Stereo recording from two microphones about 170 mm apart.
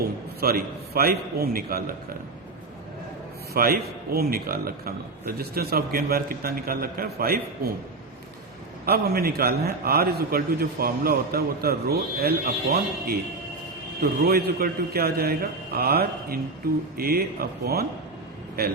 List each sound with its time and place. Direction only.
0.3 s a man's voice: 60° right (ahead or behind)
3.5 s a man's voice: 60° right (ahead or behind)
8.9 s a man's voice: 65° right (ahead or behind)